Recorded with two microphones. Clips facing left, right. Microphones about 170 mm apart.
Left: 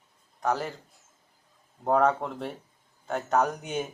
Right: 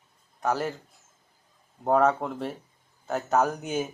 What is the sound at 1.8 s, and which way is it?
Speech, centre (ahead or behind).